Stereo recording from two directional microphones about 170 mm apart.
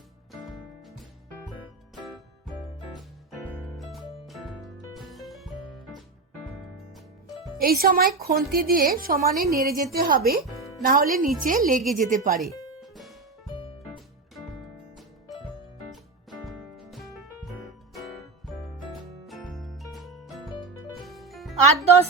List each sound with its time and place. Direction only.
3.8 s music: centre (ahead or behind)
7.6 s a woman's voice: 60° right (ahead or behind)
12.8 s music: centre (ahead or behind)
13.5 s music: 30° left (ahead or behind)
15.3 s music: centre (ahead or behind)
19.3 s music: centre (ahead or behind)